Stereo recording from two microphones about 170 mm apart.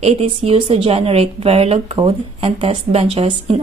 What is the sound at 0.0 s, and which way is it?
A woman's voice, 35° right (ahead or behind).